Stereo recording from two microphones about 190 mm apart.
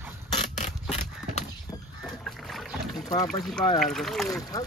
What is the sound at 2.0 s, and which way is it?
Rowboat, centre (ahead or behind).